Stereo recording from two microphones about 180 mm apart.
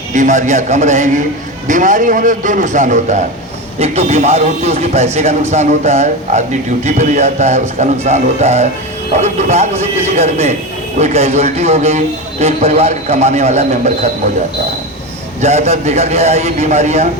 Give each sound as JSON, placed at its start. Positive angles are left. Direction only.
{"t": 0.1, "sound": "a man's voice", "side_deg": -45}
{"t": 15.4, "sound": "a man's voice", "side_deg": -40}